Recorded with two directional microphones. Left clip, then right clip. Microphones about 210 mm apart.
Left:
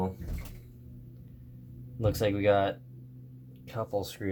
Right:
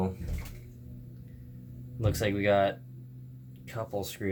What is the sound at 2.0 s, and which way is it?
Speech, 15° left (ahead or behind).